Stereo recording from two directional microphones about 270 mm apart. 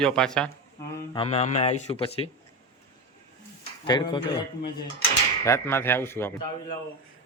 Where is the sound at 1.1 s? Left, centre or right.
Left.